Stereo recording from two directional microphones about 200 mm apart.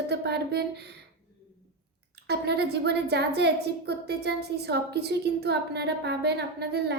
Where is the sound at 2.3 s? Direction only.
55° right (ahead or behind).